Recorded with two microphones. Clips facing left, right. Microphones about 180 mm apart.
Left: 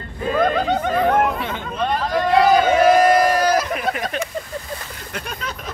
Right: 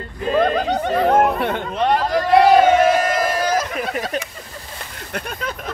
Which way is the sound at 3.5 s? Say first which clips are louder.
Left 1 dB; 40° right (ahead or behind).